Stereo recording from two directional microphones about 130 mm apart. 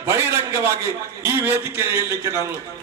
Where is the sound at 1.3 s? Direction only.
20° right (ahead or behind).